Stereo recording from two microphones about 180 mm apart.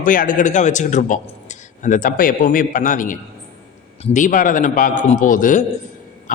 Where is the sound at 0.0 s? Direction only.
50° left (ahead or behind).